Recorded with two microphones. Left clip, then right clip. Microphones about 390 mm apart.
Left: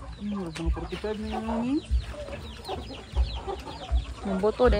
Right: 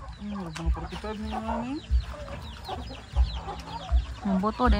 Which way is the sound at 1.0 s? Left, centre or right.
Centre.